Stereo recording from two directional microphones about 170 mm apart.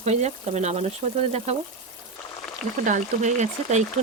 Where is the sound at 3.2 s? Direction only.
45° right (ahead or behind).